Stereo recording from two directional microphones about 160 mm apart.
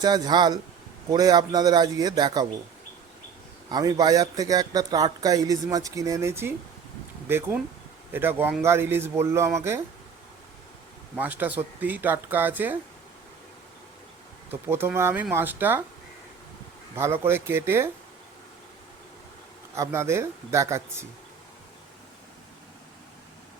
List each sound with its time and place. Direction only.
0.0 s a man's voice: 25° right (ahead or behind)
3.7 s a man's voice: 25° right (ahead or behind)
11.2 s speech: 10° right (ahead or behind)
14.5 s speech: 15° right (ahead or behind)
16.9 s speech: 15° right (ahead or behind)
19.7 s speech: 15° right (ahead or behind)